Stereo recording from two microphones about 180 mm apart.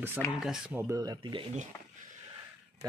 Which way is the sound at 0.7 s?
15° right (ahead or behind).